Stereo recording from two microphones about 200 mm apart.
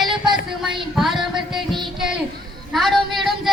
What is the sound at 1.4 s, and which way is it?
Music, centre (ahead or behind).